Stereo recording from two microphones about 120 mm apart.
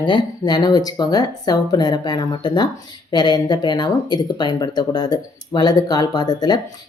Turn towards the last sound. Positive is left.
turn(degrees=35)  # may be behind; listen again after turning